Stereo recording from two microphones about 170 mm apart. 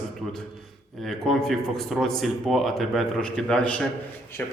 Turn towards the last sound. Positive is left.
turn(degrees=10)  # may be behind; listen again after turning